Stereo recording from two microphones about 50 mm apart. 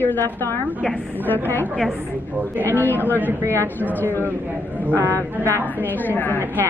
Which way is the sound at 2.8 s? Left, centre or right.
Left.